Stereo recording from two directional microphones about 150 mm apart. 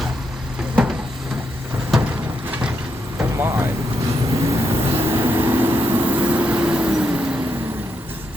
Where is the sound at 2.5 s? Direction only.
10° right (ahead or behind).